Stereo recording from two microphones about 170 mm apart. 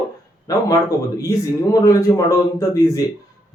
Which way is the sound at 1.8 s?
20° left (ahead or behind).